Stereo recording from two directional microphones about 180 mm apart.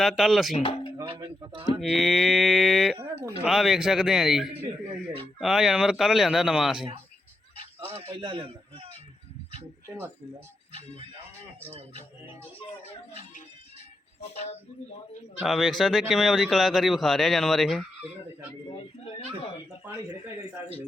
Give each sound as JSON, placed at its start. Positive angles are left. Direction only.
{"t": 0.0, "sound": "speech", "side_deg": 0}
{"t": 0.5, "sound": "speech", "side_deg": 30}
{"t": 1.2, "sound": "speech", "side_deg": -25}
{"t": 1.8, "sound": "speech", "side_deg": 0}
{"t": 3.0, "sound": "speech", "side_deg": -10}
{"t": 7.9, "sound": "a man's voice", "side_deg": -30}
{"t": 10.7, "sound": "speech", "side_deg": -30}
{"t": 15.4, "sound": "speech", "side_deg": 0}
{"t": 19.0, "sound": "speech", "side_deg": 35}